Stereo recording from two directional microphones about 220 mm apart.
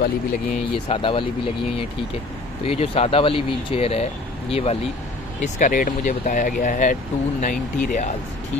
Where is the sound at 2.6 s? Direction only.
25° left (ahead or behind).